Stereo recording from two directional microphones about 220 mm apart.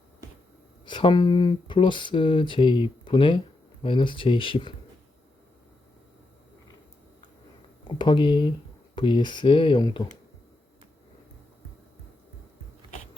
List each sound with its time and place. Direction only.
0.9 s speech: 20° left (ahead or behind)
7.9 s speech: 20° left (ahead or behind)